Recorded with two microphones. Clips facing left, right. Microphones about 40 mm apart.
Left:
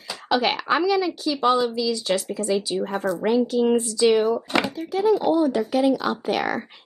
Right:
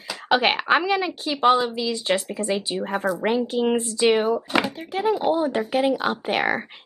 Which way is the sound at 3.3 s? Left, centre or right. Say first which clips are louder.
Left 3 dB; right.